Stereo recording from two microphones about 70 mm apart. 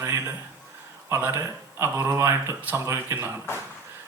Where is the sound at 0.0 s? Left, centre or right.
Right.